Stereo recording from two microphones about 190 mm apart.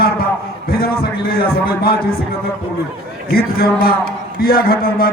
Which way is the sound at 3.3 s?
55° left (ahead or behind).